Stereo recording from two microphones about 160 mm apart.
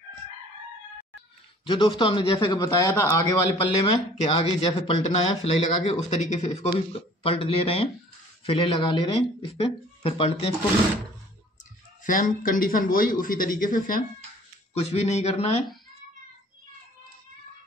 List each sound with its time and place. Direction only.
1.6 s a man's voice: 30° left (ahead or behind)
4.3 s speech: 35° left (ahead or behind)
12.0 s speech: 55° left (ahead or behind)
14.7 s speech: 40° left (ahead or behind)